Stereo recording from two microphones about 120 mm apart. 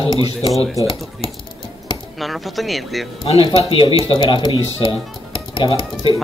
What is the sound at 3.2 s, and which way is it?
Speech, 50° left (ahead or behind).